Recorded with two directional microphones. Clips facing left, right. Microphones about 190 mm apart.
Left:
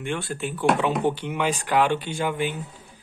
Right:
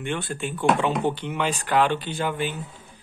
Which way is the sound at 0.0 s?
Centre (ahead or behind).